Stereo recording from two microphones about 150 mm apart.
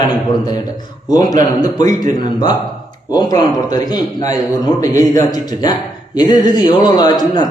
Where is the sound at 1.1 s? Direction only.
25° left (ahead or behind).